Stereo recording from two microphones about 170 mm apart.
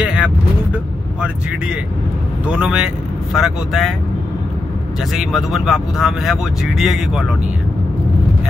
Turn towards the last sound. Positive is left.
turn(degrees=0)  # may be behind; listen again after turning